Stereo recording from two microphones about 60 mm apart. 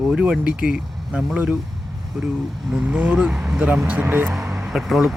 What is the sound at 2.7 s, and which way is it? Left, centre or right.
Speech, centre.